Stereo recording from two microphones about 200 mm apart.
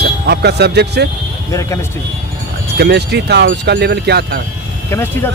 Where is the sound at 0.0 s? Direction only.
55° right (ahead or behind).